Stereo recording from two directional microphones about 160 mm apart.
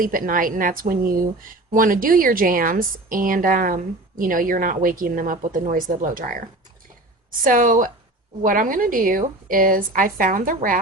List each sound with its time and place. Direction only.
0.0 s speech: 60° right (ahead or behind)